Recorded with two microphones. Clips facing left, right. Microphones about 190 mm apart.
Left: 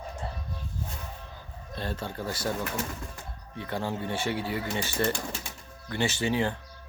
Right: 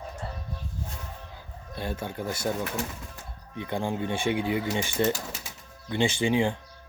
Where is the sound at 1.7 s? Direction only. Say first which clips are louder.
Right 1 dB; 10° right (ahead or behind).